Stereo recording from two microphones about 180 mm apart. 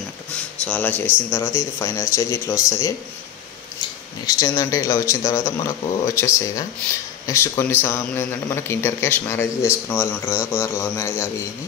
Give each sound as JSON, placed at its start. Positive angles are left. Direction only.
{"t": 0.7, "sound": "a man's voice", "side_deg": 10}
{"t": 4.3, "sound": "a man's voice", "side_deg": 20}